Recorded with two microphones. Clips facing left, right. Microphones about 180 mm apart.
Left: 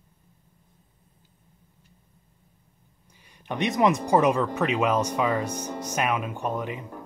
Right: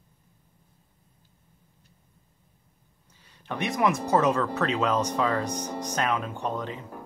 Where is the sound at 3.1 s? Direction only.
10° left (ahead or behind).